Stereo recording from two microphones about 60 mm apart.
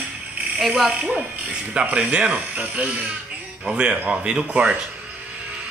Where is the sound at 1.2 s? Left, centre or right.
Right.